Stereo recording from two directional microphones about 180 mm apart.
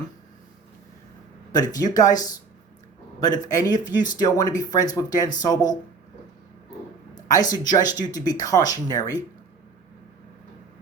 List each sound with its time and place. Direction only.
1.7 s speech: 20° left (ahead or behind)
7.3 s speech: 20° left (ahead or behind)